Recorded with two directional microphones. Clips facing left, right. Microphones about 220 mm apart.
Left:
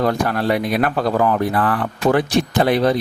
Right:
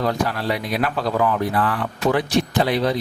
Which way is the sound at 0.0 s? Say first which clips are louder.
Left 4 dB; 50° left (ahead or behind).